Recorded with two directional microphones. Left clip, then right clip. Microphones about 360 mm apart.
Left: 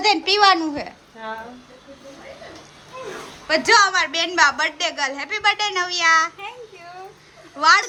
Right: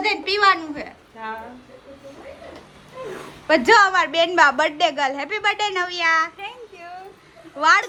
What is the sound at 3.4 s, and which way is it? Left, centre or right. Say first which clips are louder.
A woman's voice: right 1 dB; centre.